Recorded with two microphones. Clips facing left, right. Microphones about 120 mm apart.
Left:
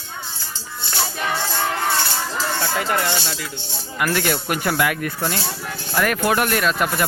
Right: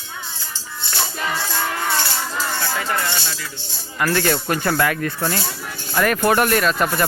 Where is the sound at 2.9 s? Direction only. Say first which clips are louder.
Left 2 dB; 25° left (ahead or behind).